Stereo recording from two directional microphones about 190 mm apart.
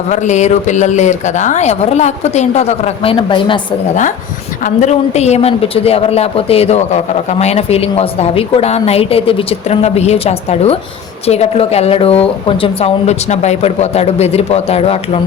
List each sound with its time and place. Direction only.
0.1 s a woman's voice: 40° left (ahead or behind)
4.6 s a woman's voice: 40° left (ahead or behind)